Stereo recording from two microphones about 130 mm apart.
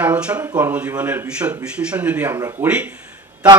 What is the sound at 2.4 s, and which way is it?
Speech, 25° right (ahead or behind).